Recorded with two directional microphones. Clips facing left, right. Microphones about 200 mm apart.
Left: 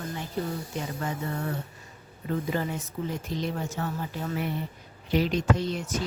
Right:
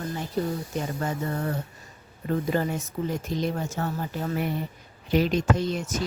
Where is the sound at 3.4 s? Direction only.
45° right (ahead or behind).